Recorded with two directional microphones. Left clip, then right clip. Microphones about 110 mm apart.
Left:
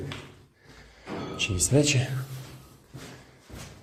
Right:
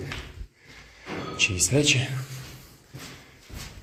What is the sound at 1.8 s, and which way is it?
Speech, 55° left (ahead or behind).